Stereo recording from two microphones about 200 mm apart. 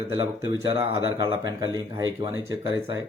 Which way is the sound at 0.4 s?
20° right (ahead or behind).